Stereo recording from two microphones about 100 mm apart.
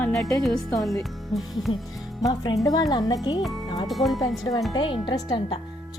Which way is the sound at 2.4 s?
40° left (ahead or behind).